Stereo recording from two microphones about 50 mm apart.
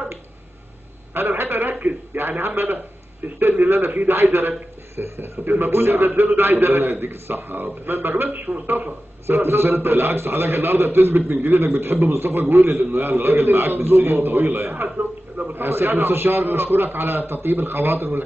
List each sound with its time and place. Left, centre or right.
1.1 s a man's voice: right
15.0 s a sound: right
15.5 s a man's voice: right